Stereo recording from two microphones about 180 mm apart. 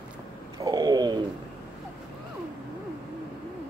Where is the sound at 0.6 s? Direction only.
20° right (ahead or behind).